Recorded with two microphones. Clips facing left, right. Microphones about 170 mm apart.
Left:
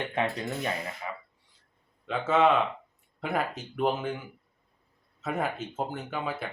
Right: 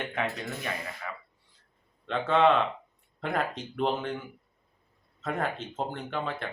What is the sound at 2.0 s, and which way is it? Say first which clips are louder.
Speech: even; 5° left (ahead or behind).